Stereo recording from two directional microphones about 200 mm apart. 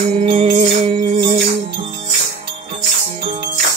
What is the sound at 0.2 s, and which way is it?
Music, 30° right (ahead or behind).